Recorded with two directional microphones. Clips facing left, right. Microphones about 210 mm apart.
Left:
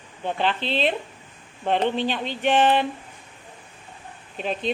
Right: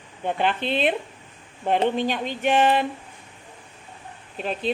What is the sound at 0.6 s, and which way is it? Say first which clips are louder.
Speech: right 1 dB; 50° right (ahead or behind).